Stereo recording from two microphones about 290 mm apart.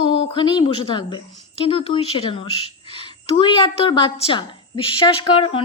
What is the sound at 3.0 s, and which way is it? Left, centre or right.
A woman's voice, centre.